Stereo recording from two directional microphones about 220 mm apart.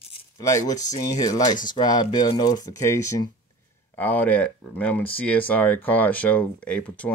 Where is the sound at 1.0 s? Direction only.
15° left (ahead or behind).